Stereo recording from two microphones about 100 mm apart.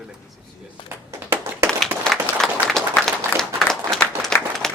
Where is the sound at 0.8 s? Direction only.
20° right (ahead or behind).